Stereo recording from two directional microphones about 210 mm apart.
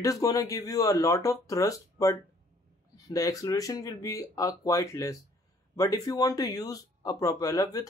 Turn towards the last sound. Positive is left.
turn(degrees=15)  # may be behind; listen again after turning